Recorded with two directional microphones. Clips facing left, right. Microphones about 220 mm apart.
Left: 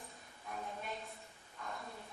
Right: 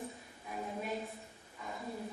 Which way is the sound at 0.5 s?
5° right (ahead or behind).